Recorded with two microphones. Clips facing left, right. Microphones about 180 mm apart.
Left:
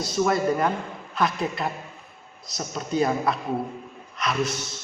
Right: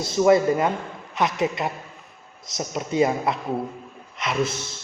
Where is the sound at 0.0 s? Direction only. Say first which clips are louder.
Right 5 dB; 25° right (ahead or behind).